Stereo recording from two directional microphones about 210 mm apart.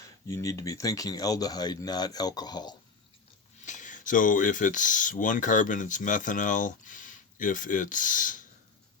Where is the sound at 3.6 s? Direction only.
35° left (ahead or behind).